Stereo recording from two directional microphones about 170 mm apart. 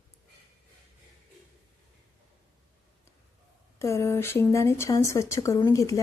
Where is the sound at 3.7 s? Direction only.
15° left (ahead or behind).